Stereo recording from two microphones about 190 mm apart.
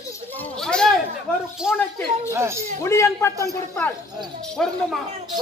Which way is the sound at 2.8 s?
15° left (ahead or behind).